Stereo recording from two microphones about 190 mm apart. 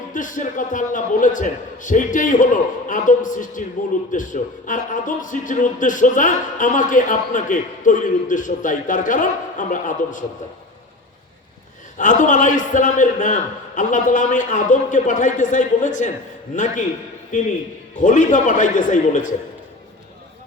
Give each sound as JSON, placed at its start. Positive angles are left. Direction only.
{"t": 0.1, "sound": "a man's voice", "side_deg": 45}
{"t": 11.9, "sound": "a man's voice", "side_deg": 40}
{"t": 18.0, "sound": "a man's voice", "side_deg": 40}